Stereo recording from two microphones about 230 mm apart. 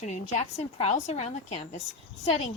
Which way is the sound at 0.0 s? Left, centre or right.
Left.